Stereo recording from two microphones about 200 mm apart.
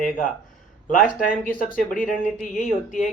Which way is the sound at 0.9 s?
40° left (ahead or behind).